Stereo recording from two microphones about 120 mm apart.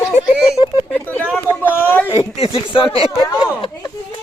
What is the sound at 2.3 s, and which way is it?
Speech, 55° left (ahead or behind).